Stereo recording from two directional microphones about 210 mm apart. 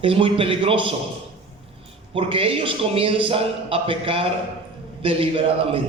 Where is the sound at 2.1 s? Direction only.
25° right (ahead or behind).